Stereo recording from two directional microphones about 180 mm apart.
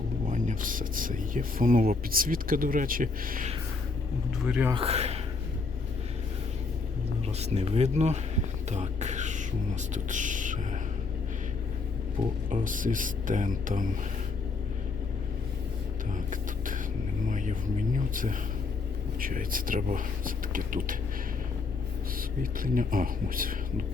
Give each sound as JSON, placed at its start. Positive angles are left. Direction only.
{"t": 0.3, "sound": "speech", "side_deg": -45}
{"t": 4.4, "sound": "speech", "side_deg": -5}
{"t": 4.7, "sound": "speech", "side_deg": -30}
{"t": 7.3, "sound": "speech", "side_deg": -35}
{"t": 12.5, "sound": "speech", "side_deg": -45}
{"t": 16.1, "sound": "music", "side_deg": -45}
{"t": 17.2, "sound": "speech", "side_deg": -45}
{"t": 22.6, "sound": "speech", "side_deg": -50}